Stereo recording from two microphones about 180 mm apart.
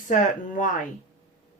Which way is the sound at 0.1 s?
45° left (ahead or behind).